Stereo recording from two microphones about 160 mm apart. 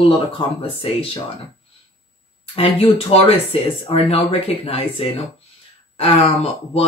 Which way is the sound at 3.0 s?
35° left (ahead or behind).